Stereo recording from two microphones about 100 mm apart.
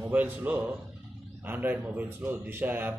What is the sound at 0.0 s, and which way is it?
A man's voice, 15° right (ahead or behind).